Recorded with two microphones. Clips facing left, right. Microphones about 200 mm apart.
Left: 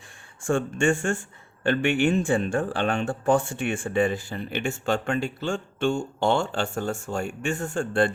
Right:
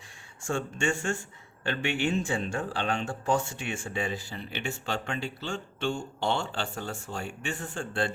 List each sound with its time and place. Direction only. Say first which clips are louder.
0.4 s speech: left 7 dB; 50° left (ahead or behind)